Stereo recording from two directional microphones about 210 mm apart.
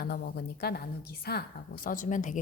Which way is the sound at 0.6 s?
50° left (ahead or behind).